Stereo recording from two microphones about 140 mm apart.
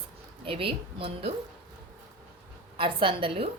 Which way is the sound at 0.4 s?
40° right (ahead or behind).